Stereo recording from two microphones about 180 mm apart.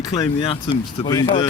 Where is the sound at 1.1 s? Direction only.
20° left (ahead or behind).